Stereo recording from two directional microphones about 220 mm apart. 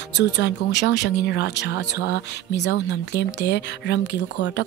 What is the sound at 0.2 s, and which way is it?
Speech, 50° left (ahead or behind).